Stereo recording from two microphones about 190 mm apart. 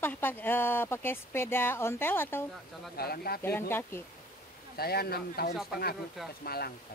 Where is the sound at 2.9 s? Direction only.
55° left (ahead or behind).